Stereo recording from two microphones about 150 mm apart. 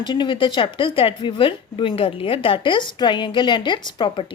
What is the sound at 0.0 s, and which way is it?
Speech, 30° left (ahead or behind).